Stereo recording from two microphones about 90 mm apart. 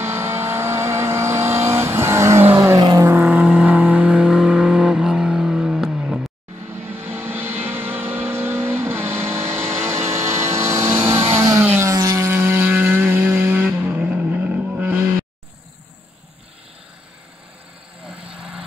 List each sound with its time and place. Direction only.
0.0 s vehicle: 25° right (ahead or behind); by 6.2 s 5° right (ahead or behind)
6.7 s vehicle: 25° right (ahead or behind)
11.6 s a sound: 30° right (ahead or behind)
12.3 s vehicle: 25° right (ahead or behind)
18.0 s vehicle: 10° right (ahead or behind)